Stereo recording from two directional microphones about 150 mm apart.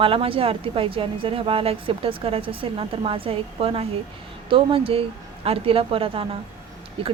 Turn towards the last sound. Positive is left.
turn(degrees=-35)  # may be behind; listen again after turning